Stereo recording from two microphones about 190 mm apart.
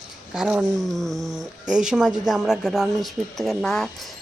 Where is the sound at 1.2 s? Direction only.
20° right (ahead or behind).